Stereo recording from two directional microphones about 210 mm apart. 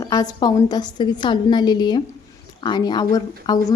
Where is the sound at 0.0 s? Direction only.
15° left (ahead or behind).